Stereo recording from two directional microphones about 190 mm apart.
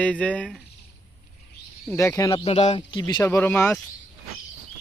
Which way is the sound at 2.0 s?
15° left (ahead or behind).